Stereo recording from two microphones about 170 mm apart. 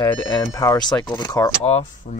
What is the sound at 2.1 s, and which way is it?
Speech, 45° left (ahead or behind).